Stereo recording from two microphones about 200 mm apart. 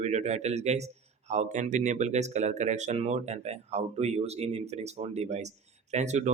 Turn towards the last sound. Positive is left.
turn(degrees=-35)  # may be behind; listen again after turning